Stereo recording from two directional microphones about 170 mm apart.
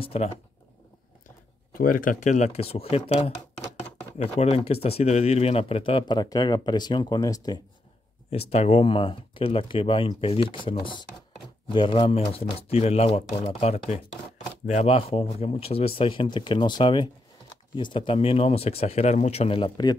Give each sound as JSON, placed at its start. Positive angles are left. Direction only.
{"t": 0.0, "sound": "speech", "side_deg": 35}
{"t": 1.7, "sound": "speech", "side_deg": 55}
{"t": 8.3, "sound": "speech", "side_deg": 40}